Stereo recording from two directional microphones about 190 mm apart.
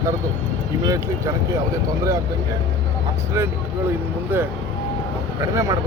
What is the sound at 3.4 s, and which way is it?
Speech, 15° right (ahead or behind).